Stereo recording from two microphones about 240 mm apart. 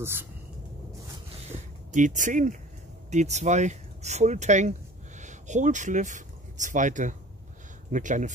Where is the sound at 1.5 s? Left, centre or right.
Right.